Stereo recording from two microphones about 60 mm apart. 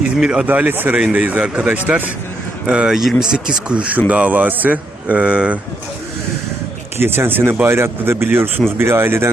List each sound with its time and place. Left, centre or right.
0.2 s speech: centre
0.4 s speech: right
0.7 s speech: right; by 3.0 s centre
3.0 s speech: centre
3.2 s speech: centre
7.0 s speech: right